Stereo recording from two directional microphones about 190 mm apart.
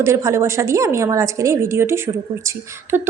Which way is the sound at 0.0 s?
15° right (ahead or behind).